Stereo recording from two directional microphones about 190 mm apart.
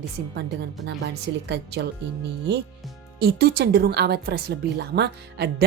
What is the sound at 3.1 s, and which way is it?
Speech, 55° right (ahead or behind).